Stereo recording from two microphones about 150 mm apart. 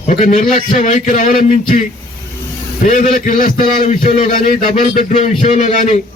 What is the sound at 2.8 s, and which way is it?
Speech, 60° left (ahead or behind).